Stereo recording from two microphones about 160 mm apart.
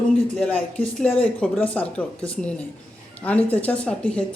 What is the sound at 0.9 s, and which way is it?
Speech, 10° left (ahead or behind).